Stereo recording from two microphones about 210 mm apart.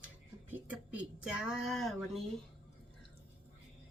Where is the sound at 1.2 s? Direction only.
5° right (ahead or behind).